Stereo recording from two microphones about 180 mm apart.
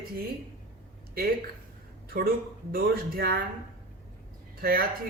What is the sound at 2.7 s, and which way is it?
Speech, 60° right (ahead or behind).